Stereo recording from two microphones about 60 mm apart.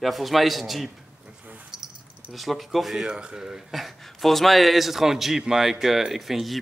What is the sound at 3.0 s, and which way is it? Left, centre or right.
Speech, centre.